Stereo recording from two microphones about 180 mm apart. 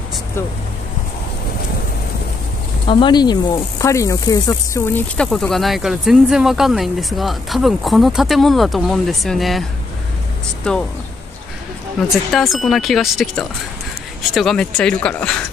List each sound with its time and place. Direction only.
2.9 s speech: 25° left (ahead or behind); by 10.8 s 5° left (ahead or behind)
12.3 s speech: centre (ahead or behind)